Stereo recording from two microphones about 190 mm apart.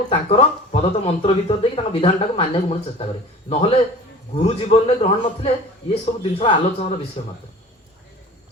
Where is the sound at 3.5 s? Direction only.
30° left (ahead or behind).